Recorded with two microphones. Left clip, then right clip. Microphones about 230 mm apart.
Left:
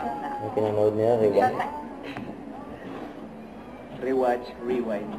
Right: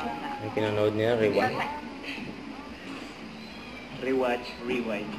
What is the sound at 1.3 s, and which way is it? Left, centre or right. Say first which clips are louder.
Speech: left 4 dB; centre.